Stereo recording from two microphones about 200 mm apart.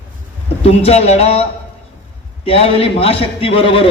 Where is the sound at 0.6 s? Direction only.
30° left (ahead or behind).